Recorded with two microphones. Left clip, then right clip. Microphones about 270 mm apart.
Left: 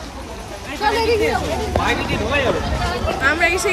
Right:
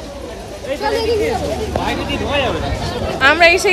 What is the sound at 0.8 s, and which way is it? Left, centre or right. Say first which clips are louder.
Speech: left 1 dB; centre.